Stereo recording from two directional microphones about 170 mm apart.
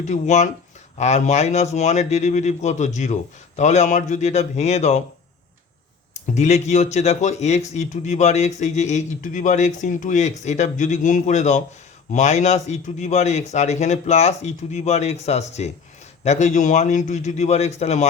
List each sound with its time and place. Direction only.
0.0 s speech: 45° left (ahead or behind)
6.3 s speech: 45° left (ahead or behind)